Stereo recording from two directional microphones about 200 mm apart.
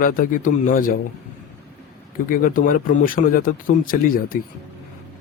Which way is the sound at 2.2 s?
45° left (ahead or behind).